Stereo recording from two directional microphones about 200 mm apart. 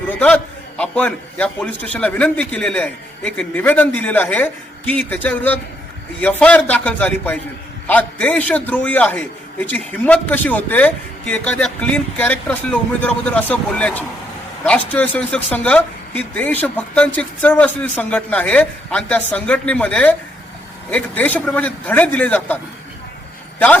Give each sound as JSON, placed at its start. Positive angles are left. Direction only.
{"t": 0.1, "sound": "speech", "side_deg": 10}